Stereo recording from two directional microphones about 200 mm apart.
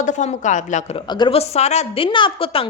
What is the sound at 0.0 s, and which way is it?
Speech, 35° left (ahead or behind).